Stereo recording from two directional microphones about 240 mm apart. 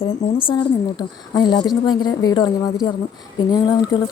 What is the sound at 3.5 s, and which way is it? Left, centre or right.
Speech, centre.